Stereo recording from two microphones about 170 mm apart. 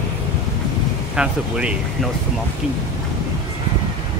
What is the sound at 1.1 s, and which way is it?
Speech, 5° right (ahead or behind).